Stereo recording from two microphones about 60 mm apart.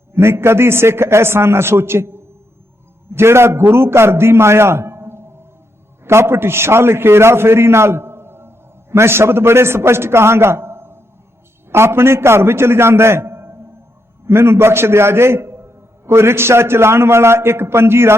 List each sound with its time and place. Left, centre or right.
0.1 s a man's voice: right